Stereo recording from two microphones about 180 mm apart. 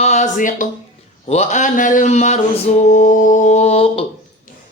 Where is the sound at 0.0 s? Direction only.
40° left (ahead or behind).